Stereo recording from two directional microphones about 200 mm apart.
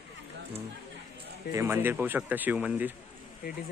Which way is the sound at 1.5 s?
15° right (ahead or behind).